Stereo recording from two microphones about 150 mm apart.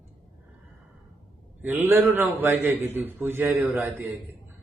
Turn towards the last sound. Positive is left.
turn(degrees=-15)  # may be behind; listen again after turning